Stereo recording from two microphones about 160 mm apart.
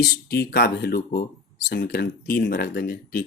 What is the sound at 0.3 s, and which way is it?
Speech, 75° left (ahead or behind).